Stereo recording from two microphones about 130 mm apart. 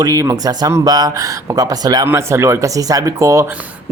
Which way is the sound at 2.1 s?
20° right (ahead or behind).